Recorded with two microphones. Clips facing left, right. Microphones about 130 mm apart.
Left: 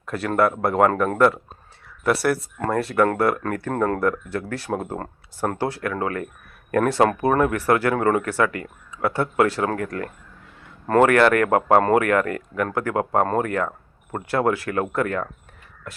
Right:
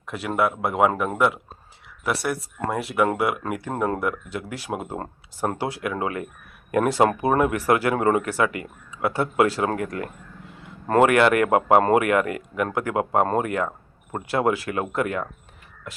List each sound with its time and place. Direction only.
0.1 s speech: centre (ahead or behind)
4.9 s speech: 25° right (ahead or behind)
5.8 s speech: 15° right (ahead or behind)